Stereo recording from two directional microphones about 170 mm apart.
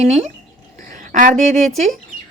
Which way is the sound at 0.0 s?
40° right (ahead or behind).